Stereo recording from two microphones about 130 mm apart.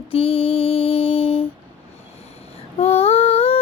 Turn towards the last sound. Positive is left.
turn(degrees=45)  # may be behind; listen again after turning